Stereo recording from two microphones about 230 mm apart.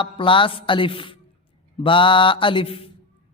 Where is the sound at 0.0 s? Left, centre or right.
Left.